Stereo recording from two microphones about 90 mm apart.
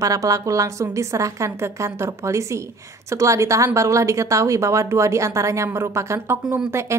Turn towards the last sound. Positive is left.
turn(degrees=-30)  # may be behind; listen again after turning